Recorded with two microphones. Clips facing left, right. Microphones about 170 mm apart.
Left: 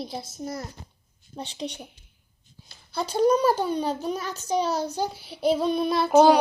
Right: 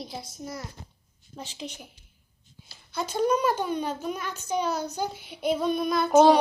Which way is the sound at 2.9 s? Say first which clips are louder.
Left 4 dB; 35° left (ahead or behind).